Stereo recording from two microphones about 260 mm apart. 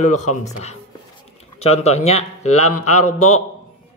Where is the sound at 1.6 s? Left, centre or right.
Left.